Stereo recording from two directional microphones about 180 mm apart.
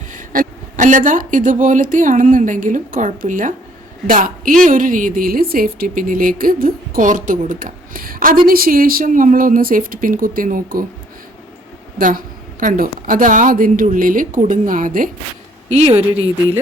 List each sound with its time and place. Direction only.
0.1 s speech: 45° right (ahead or behind)
11.9 s speech: 50° right (ahead or behind)
15.7 s speech: 35° right (ahead or behind)